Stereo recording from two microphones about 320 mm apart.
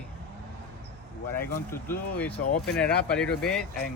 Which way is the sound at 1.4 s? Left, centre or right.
Centre.